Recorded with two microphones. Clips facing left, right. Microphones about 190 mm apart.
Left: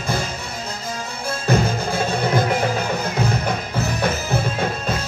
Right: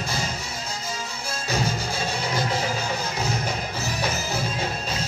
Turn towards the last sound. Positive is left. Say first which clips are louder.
# left 6 dB
turn(degrees=55)  # may be behind; listen again after turning